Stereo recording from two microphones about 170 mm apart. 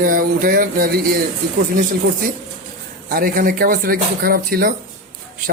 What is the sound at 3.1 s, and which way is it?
Speech, 60° right (ahead or behind).